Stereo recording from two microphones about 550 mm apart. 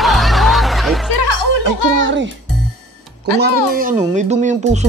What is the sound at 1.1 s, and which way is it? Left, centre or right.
Music, left.